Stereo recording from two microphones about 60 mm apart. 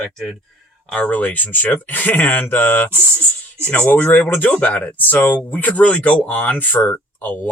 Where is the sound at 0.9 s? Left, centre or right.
Left.